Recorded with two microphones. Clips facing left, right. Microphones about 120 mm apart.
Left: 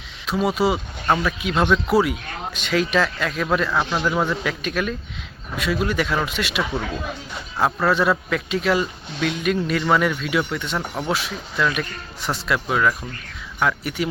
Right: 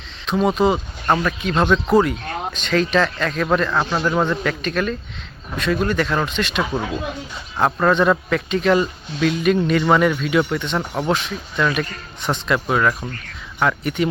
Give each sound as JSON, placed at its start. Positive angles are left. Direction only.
{"t": 0.3, "sound": "speech", "side_deg": 5}
{"t": 3.8, "sound": "speech", "side_deg": -15}
{"t": 4.0, "sound": "speech", "side_deg": 5}
{"t": 7.6, "sound": "speech", "side_deg": 5}
{"t": 11.1, "sound": "speech", "side_deg": 5}